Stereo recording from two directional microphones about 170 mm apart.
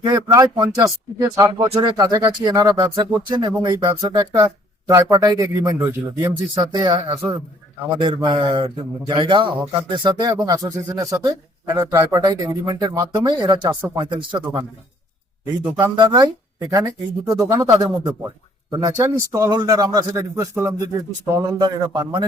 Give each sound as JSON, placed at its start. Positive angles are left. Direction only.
{"t": 0.0, "sound": "speech", "side_deg": -20}
{"t": 14.4, "sound": "speech", "side_deg": -15}
{"t": 16.0, "sound": "speech", "side_deg": -25}